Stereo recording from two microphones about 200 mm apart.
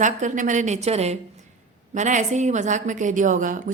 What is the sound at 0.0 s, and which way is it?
A woman's voice, 40° right (ahead or behind).